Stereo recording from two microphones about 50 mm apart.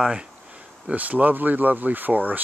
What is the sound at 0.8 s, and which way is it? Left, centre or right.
Speech, right.